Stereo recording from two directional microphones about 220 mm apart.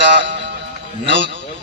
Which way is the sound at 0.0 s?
55° right (ahead or behind).